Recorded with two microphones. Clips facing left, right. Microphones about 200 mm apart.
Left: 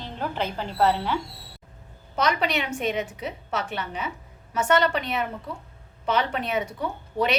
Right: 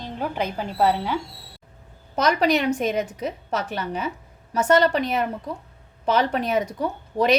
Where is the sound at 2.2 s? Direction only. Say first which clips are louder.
Right 5 dB; 40° right (ahead or behind).